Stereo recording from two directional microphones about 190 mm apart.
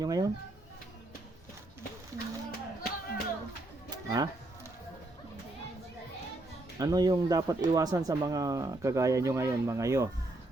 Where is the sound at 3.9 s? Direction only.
20° right (ahead or behind).